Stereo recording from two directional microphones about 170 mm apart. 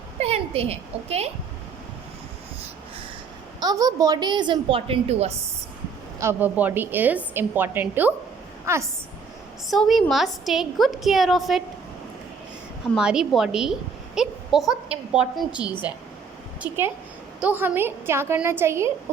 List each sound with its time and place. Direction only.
0.2 s a woman's voice: 35° right (ahead or behind)
3.6 s a woman's voice: 20° right (ahead or behind)
6.1 s a woman's voice: 15° right (ahead or behind)
9.6 s a woman's voice: centre (ahead or behind)
12.9 s a woman's voice: 5° right (ahead or behind)